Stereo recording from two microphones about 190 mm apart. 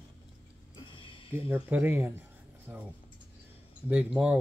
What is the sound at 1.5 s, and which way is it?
Speech, 10° right (ahead or behind).